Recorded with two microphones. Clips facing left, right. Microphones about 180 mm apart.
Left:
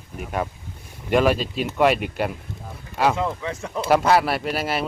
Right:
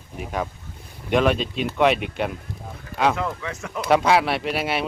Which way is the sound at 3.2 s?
25° left (ahead or behind).